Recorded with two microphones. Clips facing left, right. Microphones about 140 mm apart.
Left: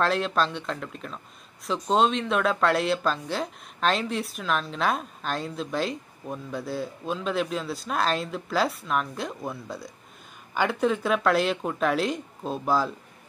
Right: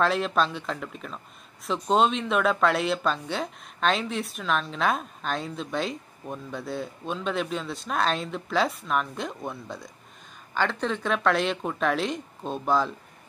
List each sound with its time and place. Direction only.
0.0 s speech: centre (ahead or behind)